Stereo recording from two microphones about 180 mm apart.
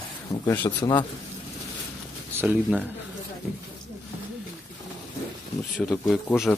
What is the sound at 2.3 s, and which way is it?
Speech, 10° right (ahead or behind).